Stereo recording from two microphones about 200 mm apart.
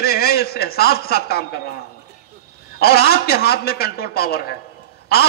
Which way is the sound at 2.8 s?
50° left (ahead or behind).